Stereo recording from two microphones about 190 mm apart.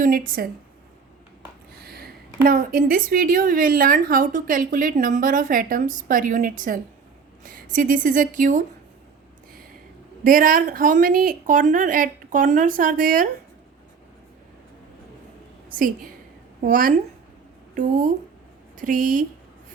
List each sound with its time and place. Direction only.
0.0 s a woman's voice: 45° right (ahead or behind)
1.8 s a woman's voice: 55° right (ahead or behind)
10.2 s a woman's voice: 50° right (ahead or behind)
16.6 s a woman's voice: 45° right (ahead or behind)